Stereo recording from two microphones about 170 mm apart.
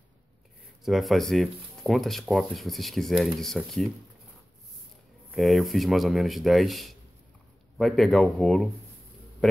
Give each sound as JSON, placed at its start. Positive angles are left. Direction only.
{"t": 0.8, "sound": "speech", "side_deg": 0}
{"t": 5.3, "sound": "speech", "side_deg": 0}